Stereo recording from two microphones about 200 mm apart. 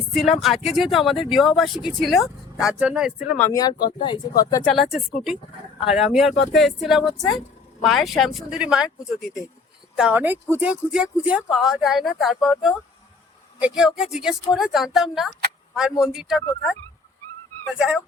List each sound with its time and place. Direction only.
0.1 s speech: centre (ahead or behind)
3.3 s speech: 10° left (ahead or behind)
4.6 s speech: centre (ahead or behind)
7.2 s speech: 15° left (ahead or behind)
7.8 s speech: centre (ahead or behind)
17.7 s speech: 5° right (ahead or behind)